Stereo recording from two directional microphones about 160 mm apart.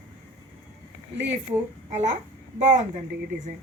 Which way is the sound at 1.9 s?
50° right (ahead or behind).